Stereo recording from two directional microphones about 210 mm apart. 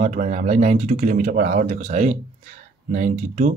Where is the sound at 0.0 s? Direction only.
35° right (ahead or behind).